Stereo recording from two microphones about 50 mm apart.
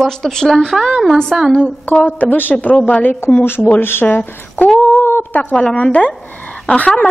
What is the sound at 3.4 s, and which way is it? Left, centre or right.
Speech, left.